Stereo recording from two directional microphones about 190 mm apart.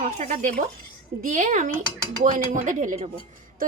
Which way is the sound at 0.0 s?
40° right (ahead or behind).